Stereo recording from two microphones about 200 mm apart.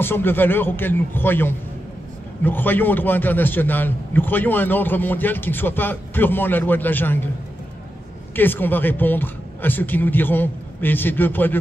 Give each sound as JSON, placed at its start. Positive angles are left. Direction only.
{"t": 0.0, "sound": "a man's voice", "side_deg": 10}
{"t": 8.4, "sound": "a man's voice", "side_deg": 10}